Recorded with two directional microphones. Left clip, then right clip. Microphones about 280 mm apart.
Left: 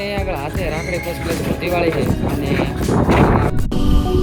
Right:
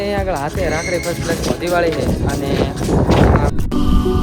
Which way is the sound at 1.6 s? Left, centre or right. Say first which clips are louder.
Right 1 dB; centre.